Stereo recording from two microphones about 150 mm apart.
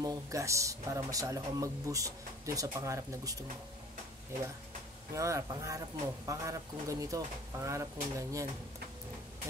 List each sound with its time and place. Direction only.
0.0 s speech: 25° right (ahead or behind)
5.1 s speech: 20° right (ahead or behind)